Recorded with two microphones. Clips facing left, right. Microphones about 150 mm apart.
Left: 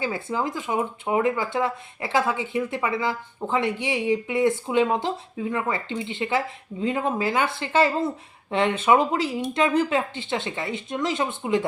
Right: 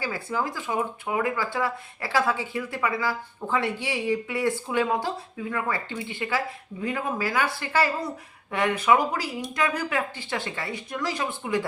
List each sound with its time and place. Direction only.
0.0 s speech: 20° left (ahead or behind)